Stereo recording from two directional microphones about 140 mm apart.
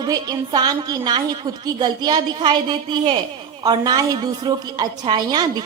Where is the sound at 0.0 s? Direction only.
30° right (ahead or behind).